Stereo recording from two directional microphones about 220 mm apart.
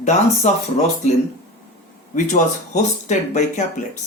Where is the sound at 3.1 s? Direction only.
30° left (ahead or behind).